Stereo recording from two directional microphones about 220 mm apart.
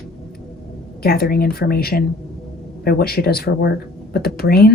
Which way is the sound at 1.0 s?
45° left (ahead or behind).